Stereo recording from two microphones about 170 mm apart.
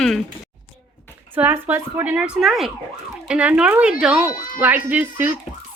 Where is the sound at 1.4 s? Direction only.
10° right (ahead or behind).